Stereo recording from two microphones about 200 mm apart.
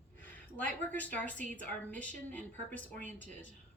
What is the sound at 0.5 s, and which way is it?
Speech, 10° left (ahead or behind).